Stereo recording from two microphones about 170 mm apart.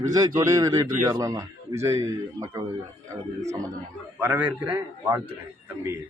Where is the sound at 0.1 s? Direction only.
20° right (ahead or behind).